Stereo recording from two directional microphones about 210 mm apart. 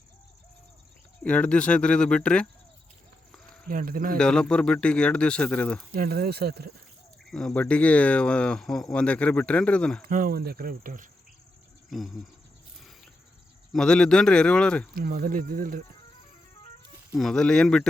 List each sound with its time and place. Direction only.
1.2 s speech: 5° left (ahead or behind)
3.7 s speech: 40° right (ahead or behind)
4.2 s speech: 5° left (ahead or behind)
5.9 s speech: 45° right (ahead or behind)
7.3 s speech: 5° left (ahead or behind)
10.1 s speech: 40° right (ahead or behind)
11.9 s speech: centre (ahead or behind)
13.7 s speech: 5° left (ahead or behind)
14.9 s speech: 45° right (ahead or behind)
17.1 s speech: centre (ahead or behind)